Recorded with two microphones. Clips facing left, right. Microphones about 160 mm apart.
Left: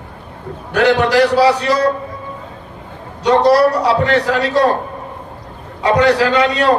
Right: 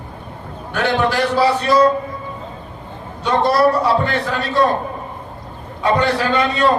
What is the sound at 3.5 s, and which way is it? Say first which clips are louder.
A man's voice: left 1 dB; 85° left.